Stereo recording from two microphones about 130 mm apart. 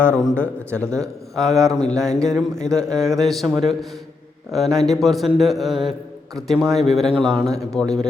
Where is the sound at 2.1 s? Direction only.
5° left (ahead or behind).